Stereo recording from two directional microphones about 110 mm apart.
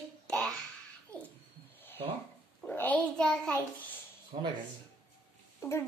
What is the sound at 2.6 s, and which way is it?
Speech, 15° left (ahead or behind).